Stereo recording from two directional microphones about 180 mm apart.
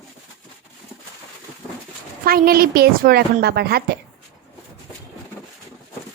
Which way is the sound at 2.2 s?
55° right (ahead or behind).